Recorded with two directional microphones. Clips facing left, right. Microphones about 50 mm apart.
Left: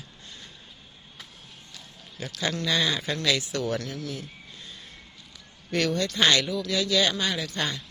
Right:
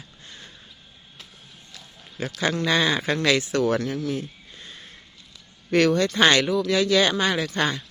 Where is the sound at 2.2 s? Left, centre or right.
Right.